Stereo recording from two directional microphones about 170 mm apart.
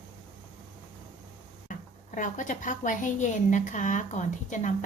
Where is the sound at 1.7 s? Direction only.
50° left (ahead or behind).